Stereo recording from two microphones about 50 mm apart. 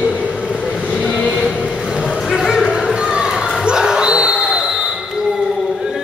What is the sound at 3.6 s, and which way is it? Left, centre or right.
Dog, centre.